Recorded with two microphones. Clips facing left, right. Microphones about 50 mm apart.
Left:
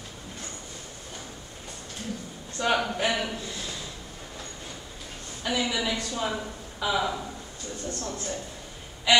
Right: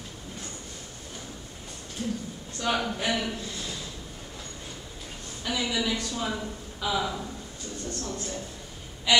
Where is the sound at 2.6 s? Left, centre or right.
Centre.